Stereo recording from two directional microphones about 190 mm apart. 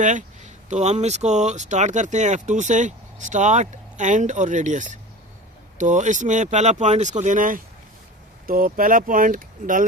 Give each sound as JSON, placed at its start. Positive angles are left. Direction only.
{"t": 0.0, "sound": "speech", "side_deg": -40}